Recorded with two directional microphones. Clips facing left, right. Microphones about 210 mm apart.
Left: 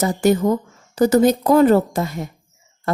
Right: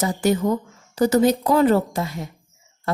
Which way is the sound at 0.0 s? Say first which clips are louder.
Left 4 dB; 45° left (ahead or behind).